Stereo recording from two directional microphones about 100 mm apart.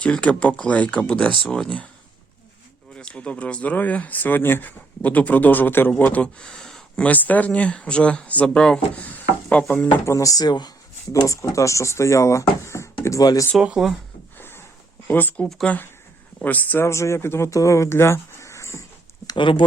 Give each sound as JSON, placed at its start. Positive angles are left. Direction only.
{"t": 0.0, "sound": "speech", "side_deg": 10}
{"t": 2.9, "sound": "speech", "side_deg": 10}
{"t": 10.1, "sound": "speech", "side_deg": 35}
{"t": 11.3, "sound": "speech", "side_deg": 30}
{"t": 13.6, "sound": "speech", "side_deg": -5}
{"t": 14.3, "sound": "a sound", "side_deg": 20}
{"t": 15.0, "sound": "speech", "side_deg": 20}
{"t": 15.4, "sound": "speech", "side_deg": 5}
{"t": 16.4, "sound": "speech", "side_deg": 15}
{"t": 19.4, "sound": "speech", "side_deg": 55}